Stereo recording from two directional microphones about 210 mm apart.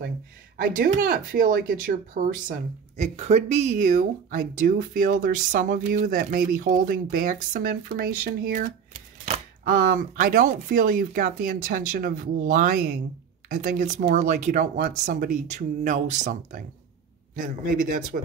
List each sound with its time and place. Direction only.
0.6 s speech: 40° right (ahead or behind)
3.0 s speech: 30° right (ahead or behind)
18.1 s speech: 45° right (ahead or behind)